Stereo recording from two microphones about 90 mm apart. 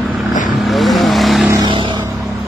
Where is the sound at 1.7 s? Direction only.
65° right (ahead or behind).